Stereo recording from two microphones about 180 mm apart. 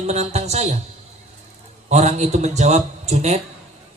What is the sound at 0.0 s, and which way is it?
Speech, 40° right (ahead or behind).